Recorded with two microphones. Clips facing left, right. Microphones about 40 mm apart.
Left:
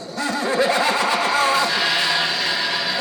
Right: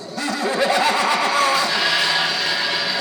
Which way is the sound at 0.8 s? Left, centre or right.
Right.